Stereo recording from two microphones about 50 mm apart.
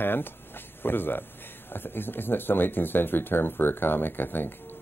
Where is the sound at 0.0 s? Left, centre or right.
Left.